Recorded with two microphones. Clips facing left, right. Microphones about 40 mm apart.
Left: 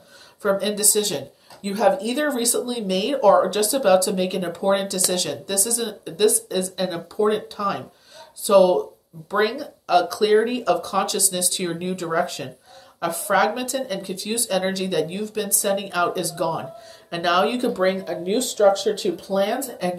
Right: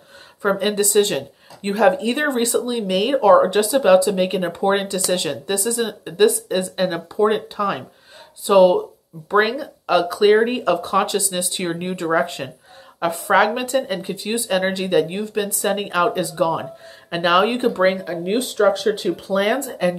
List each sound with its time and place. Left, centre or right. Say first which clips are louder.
0.4 s speech: right 3 dB; right
18.9 s speech: right 2 dB; right